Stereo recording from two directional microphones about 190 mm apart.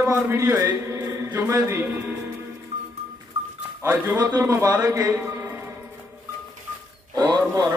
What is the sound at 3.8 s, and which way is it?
A man's voice, 15° right (ahead or behind).